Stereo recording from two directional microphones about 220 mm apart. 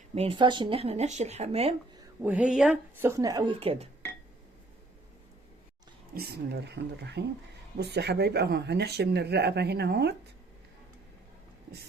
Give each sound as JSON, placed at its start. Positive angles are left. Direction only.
{"t": 0.1, "sound": "speech", "side_deg": -25}
{"t": 2.2, "sound": "speech", "side_deg": -5}
{"t": 6.1, "sound": "speech", "side_deg": -45}